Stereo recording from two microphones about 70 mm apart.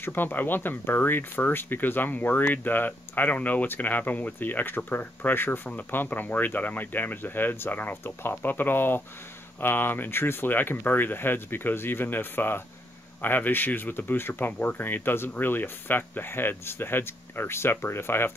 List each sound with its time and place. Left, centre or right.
0.0 s speech: left